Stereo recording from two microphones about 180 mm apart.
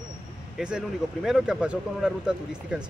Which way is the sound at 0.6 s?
5° right (ahead or behind).